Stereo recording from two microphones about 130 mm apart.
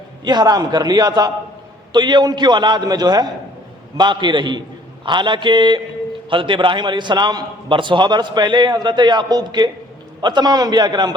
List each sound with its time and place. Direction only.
0.3 s a man's voice: 35° right (ahead or behind)